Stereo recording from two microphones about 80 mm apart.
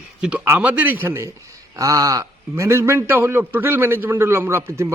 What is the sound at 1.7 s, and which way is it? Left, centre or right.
A man's voice, right.